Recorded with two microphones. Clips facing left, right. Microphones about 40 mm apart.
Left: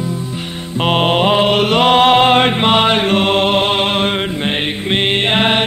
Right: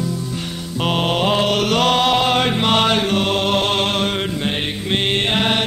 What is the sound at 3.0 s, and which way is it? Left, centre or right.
Music, left.